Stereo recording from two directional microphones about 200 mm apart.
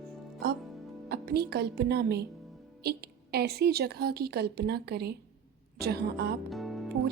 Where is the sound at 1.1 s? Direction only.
55° right (ahead or behind).